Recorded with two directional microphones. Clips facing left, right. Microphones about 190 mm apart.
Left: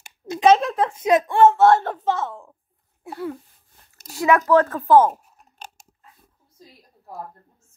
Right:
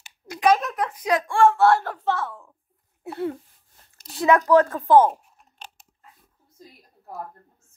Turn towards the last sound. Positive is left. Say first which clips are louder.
# left 3 dB
turn(degrees=45)  # may be behind; listen again after turning